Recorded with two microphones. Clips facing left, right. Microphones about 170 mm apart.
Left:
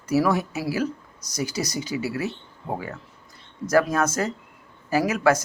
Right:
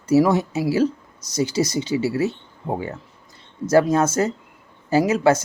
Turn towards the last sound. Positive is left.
turn(degrees=-25)  # may be behind; listen again after turning